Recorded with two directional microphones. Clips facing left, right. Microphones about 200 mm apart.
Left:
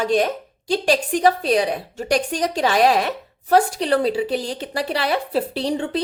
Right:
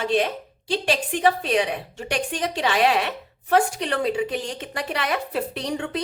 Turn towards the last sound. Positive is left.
turn(degrees=30)  # may be behind; listen again after turning